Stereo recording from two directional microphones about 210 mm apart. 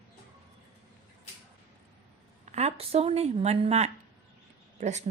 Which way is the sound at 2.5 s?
30° right (ahead or behind).